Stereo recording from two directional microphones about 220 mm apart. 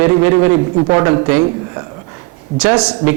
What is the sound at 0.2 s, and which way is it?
A man's voice, 15° right (ahead or behind).